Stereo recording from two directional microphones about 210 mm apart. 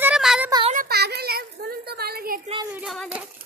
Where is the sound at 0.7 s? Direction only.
45° right (ahead or behind).